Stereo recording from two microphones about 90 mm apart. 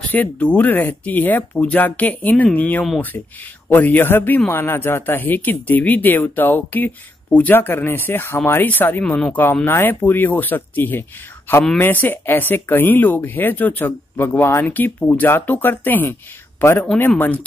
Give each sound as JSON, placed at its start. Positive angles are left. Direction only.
{"t": 0.1, "sound": "speech", "side_deg": 15}